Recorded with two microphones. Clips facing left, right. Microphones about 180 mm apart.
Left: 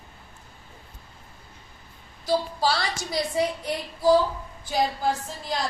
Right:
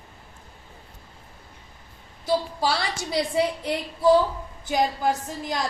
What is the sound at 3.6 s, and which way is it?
A woman's voice, 25° right (ahead or behind).